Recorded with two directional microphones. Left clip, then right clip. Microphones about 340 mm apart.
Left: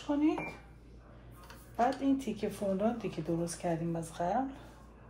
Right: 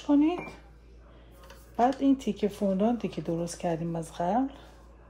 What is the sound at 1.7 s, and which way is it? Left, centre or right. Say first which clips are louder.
Speech: right 5 dB; right.